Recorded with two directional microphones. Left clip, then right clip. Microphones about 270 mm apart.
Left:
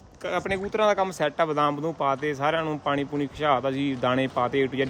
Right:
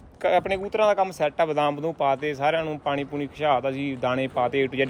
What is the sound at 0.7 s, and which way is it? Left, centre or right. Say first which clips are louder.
Speech: right 1 dB; left.